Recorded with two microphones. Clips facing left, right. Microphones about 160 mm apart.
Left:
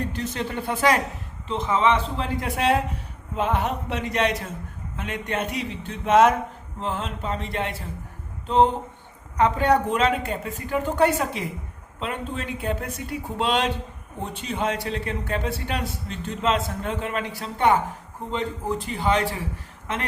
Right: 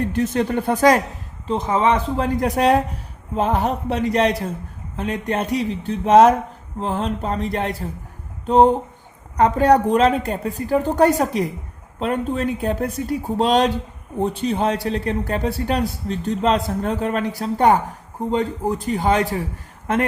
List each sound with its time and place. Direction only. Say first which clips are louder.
0.1 s a man's voice: right 9 dB; 55° right (ahead or behind)